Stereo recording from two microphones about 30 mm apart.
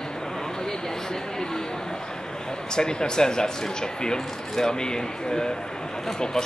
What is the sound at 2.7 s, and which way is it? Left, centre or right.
Speech, left.